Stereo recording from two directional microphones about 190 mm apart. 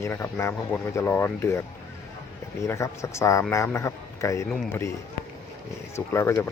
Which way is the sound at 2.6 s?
15° left (ahead or behind).